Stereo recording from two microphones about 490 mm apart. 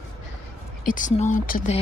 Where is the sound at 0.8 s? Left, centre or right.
Centre.